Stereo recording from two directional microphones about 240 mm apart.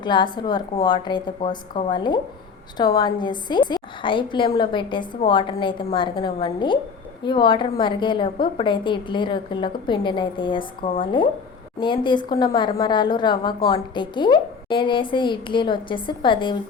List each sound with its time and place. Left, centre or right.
0.0 s a woman's voice: centre